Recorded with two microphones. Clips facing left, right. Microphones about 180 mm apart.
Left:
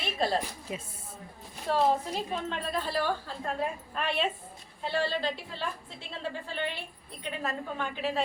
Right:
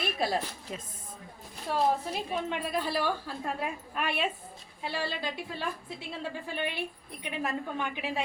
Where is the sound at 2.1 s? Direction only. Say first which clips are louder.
Right 1 dB; 10° right (ahead or behind).